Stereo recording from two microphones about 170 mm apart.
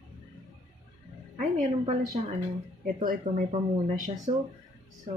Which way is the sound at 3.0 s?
55° right (ahead or behind).